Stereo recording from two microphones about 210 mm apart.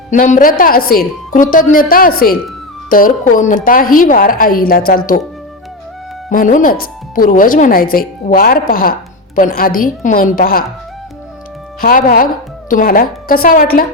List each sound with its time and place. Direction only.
0.1 s a woman's voice: 35° left (ahead or behind)
6.3 s speech: 40° left (ahead or behind)
11.8 s speech: 40° left (ahead or behind)